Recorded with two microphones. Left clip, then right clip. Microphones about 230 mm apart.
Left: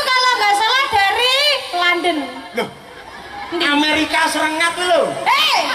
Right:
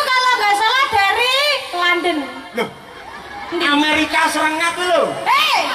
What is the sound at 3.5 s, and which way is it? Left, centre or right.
A man's voice, centre.